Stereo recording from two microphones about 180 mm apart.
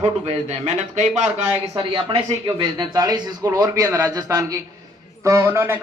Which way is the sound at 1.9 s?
25° right (ahead or behind).